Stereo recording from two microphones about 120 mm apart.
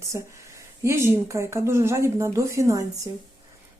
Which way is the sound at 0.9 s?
25° right (ahead or behind).